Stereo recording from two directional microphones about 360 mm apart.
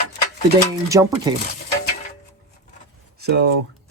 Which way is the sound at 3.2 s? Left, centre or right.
Right.